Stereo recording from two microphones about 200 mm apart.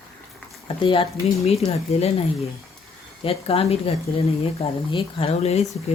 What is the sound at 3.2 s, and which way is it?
Speech, 30° left (ahead or behind).